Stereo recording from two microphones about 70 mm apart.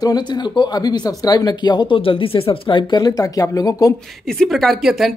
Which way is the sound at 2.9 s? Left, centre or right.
Left.